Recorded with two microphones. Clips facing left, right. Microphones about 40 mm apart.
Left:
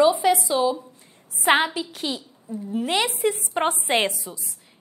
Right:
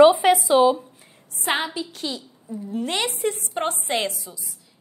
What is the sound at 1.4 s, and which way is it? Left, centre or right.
A woman's voice, centre.